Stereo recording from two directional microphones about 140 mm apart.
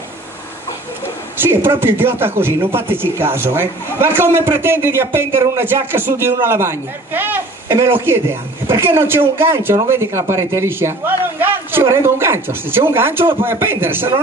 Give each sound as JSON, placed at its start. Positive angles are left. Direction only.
{"t": 1.4, "sound": "speech", "side_deg": -15}